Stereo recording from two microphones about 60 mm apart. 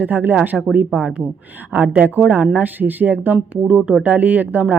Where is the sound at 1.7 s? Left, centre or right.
Right.